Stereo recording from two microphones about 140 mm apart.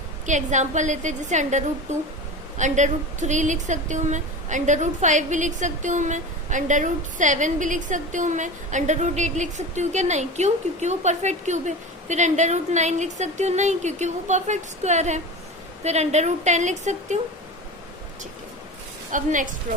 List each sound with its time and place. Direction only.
0.3 s a woman's voice: 60° right (ahead or behind)
19.1 s a woman's voice: 65° right (ahead or behind)